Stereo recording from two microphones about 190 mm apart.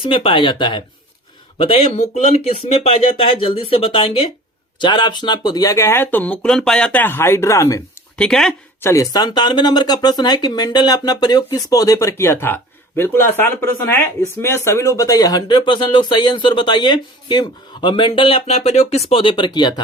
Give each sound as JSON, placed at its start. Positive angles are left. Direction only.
{"t": 0.0, "sound": "speech", "side_deg": 30}
{"t": 8.2, "sound": "speech", "side_deg": 0}
{"t": 8.8, "sound": "speech", "side_deg": 15}